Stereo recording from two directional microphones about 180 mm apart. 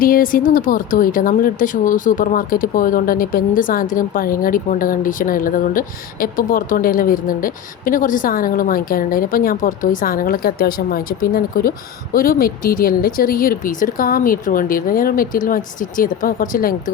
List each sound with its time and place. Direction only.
0.0 s a woman's voice: 50° left (ahead or behind)